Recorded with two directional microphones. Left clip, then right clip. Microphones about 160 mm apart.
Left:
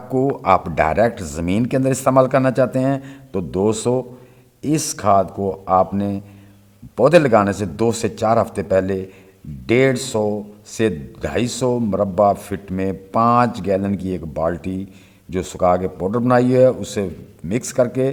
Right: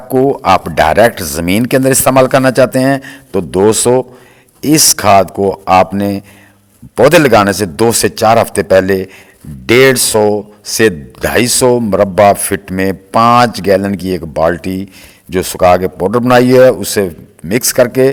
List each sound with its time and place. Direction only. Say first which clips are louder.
0.1 s speech: right 7 dB; 25° right (ahead or behind)